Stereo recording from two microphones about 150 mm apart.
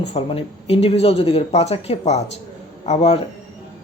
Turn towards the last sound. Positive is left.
turn(degrees=45)  # may be behind; listen again after turning